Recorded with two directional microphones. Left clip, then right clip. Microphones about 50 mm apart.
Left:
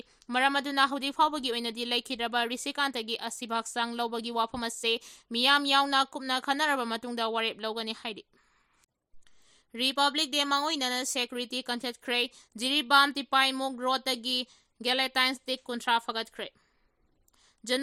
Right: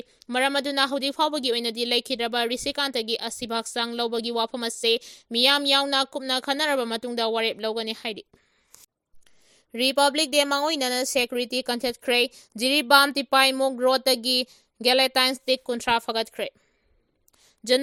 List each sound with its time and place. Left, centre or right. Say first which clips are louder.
0.3 s speech: right 3 dB; right
5.4 s speech: right 4 dB; centre
7.9 s speech: right 6 dB; right
9.5 s a woman's voice: right 6 dB; right
13.6 s a woman's voice: right 8 dB; right
15.6 s speech: right 4 dB; right
17.4 s a sound: right 9 dB; right